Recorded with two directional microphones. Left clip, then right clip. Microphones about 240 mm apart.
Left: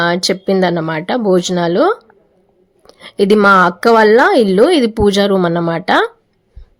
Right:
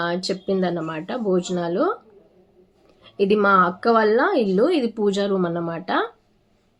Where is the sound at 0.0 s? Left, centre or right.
Left.